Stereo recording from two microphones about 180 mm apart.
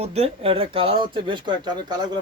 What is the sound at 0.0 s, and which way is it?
Speech, 35° right (ahead or behind).